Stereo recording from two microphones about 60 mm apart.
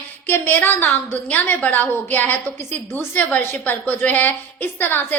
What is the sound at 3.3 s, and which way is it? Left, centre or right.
A woman's voice, left.